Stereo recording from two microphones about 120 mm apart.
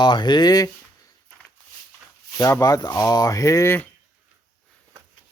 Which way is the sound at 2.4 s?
25° left (ahead or behind).